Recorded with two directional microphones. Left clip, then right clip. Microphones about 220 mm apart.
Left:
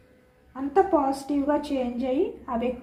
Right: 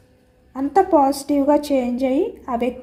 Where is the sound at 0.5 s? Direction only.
55° right (ahead or behind).